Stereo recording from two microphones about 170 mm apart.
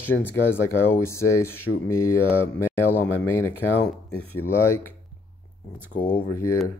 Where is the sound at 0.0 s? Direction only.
10° left (ahead or behind).